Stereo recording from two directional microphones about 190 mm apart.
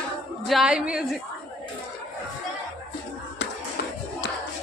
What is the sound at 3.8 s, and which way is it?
Battle cry, 55° left (ahead or behind).